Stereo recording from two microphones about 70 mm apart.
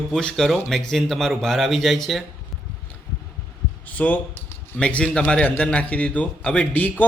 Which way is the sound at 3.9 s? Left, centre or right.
Left.